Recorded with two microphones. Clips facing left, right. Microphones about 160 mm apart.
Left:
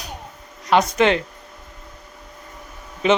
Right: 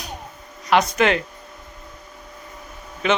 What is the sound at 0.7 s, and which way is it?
Speech, 30° left (ahead or behind).